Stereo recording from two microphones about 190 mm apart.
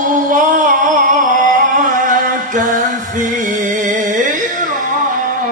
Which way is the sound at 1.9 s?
45° right (ahead or behind).